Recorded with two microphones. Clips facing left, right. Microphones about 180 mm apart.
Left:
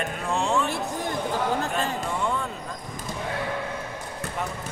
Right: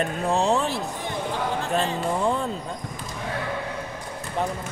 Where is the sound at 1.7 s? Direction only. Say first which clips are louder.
Right 3 dB; 35° right (ahead or behind).